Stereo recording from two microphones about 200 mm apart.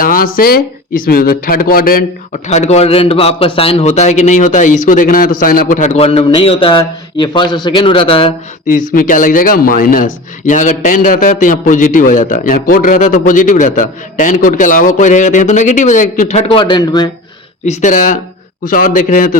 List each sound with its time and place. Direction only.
0.0 s speech: 45° left (ahead or behind)
2.5 s a man's voice: 35° left (ahead or behind)
8.9 s a man's voice: 45° left (ahead or behind); by 17.1 s 20° left (ahead or behind)
17.7 s a man's voice: 35° left (ahead or behind)